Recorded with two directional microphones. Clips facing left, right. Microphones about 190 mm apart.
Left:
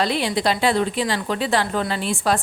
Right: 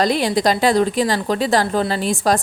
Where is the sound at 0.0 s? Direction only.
40° right (ahead or behind).